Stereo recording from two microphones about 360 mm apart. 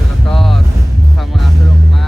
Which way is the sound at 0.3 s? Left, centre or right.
Centre.